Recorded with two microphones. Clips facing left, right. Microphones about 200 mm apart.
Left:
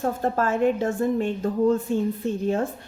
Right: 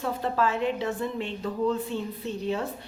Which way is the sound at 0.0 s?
50° left (ahead or behind).